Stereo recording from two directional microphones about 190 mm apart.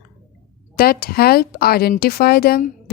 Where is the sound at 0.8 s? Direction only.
55° left (ahead or behind).